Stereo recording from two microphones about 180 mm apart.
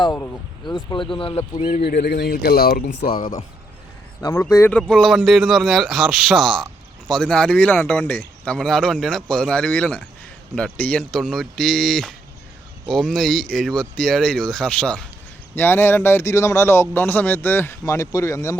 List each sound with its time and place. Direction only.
0.0 s a man's voice: 15° left (ahead or behind)
1.6 s speech: 55° left (ahead or behind)
4.2 s a man's voice: 15° left (ahead or behind)
4.8 s a man's voice: centre (ahead or behind)